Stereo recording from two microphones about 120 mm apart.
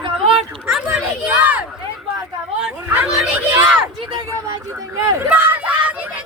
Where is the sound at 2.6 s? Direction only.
5° right (ahead or behind).